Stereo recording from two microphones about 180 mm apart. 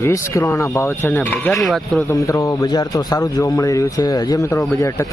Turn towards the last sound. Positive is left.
turn(degrees=20)  # may be behind; listen again after turning